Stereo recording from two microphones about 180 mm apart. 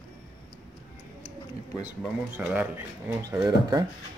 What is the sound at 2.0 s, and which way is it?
Speech, 10° right (ahead or behind).